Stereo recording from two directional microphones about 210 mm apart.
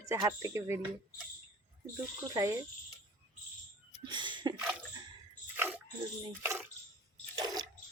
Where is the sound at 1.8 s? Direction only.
15° right (ahead or behind).